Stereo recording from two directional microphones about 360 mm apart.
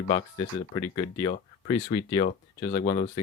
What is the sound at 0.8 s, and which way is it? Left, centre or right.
Speech, centre.